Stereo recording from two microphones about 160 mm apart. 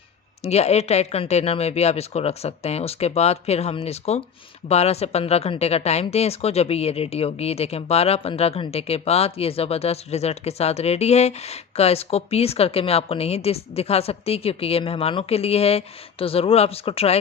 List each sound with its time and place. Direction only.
0.4 s speech: 40° left (ahead or behind)